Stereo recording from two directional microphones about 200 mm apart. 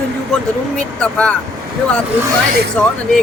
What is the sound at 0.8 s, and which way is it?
Speech, 5° left (ahead or behind).